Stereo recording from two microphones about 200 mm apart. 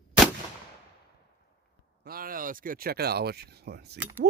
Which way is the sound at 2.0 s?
45° right (ahead or behind).